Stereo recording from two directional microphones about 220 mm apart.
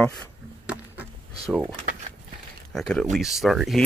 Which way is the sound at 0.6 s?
5° right (ahead or behind).